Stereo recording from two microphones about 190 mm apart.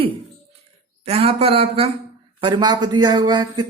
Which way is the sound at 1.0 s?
30° right (ahead or behind).